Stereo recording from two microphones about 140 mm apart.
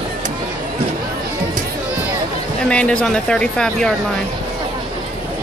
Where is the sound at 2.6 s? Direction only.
5° left (ahead or behind).